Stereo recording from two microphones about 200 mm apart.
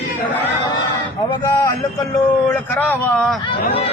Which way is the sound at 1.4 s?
15° left (ahead or behind).